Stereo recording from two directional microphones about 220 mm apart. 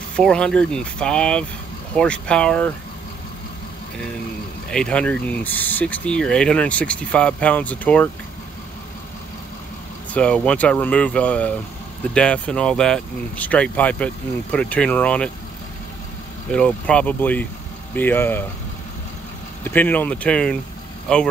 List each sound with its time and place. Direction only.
0.1 s speech: 5° left (ahead or behind)
4.6 s speech: 5° left (ahead or behind)
10.1 s speech: 5° left (ahead or behind)
16.5 s speech: 5° left (ahead or behind)
19.6 s speech: 10° left (ahead or behind)